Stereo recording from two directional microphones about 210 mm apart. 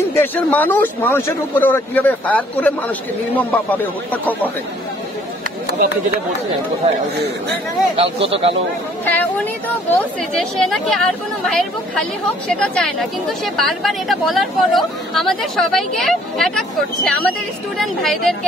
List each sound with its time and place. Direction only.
0.1 s speech: 10° left (ahead or behind)
7.9 s speech: 25° right (ahead or behind)
9.0 s speech: 10° left (ahead or behind)